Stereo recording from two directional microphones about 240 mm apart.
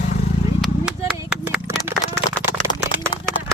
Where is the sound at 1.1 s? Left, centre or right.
Centre.